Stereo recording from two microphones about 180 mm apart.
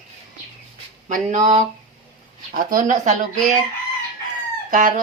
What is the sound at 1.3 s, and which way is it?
Speech, 45° right (ahead or behind).